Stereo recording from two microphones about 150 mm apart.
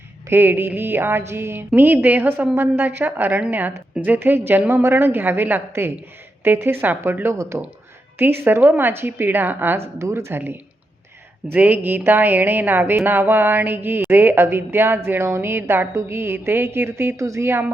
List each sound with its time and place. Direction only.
0.3 s speech: 15° right (ahead or behind)